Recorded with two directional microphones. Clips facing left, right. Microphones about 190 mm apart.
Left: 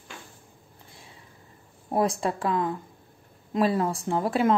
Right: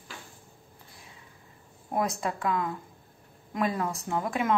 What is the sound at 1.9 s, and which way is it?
Speech, 30° left (ahead or behind).